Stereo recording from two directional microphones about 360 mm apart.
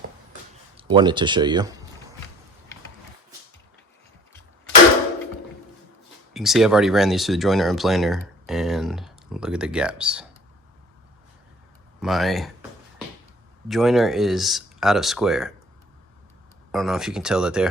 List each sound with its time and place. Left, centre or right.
0.8 s speech: centre
6.3 s speech: centre
11.9 s speech: centre
13.7 s speech: centre
16.7 s speech: centre